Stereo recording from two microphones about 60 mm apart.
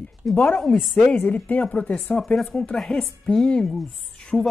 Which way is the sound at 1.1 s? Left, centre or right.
Left.